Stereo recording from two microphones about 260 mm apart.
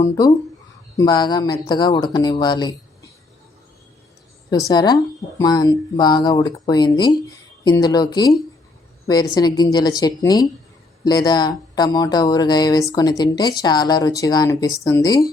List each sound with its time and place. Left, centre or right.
0.0 s speech: centre
4.4 s speech: centre